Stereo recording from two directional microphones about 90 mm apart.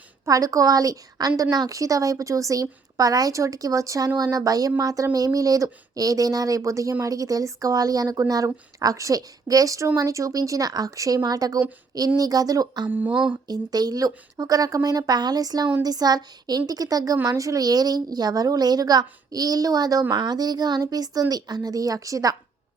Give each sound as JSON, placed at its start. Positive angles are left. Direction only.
{"t": 0.3, "sound": "a woman's voice", "side_deg": -40}
{"t": 12.9, "sound": "a sound", "side_deg": -15}
{"t": 13.3, "sound": "a woman's voice", "side_deg": -45}